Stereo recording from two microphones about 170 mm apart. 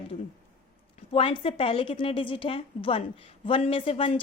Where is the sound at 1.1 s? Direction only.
35° left (ahead or behind).